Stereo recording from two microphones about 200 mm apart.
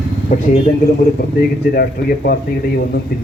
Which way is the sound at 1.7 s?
50° left (ahead or behind).